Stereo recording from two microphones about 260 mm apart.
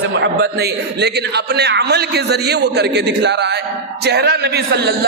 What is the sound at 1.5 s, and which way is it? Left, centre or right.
A man's voice, right.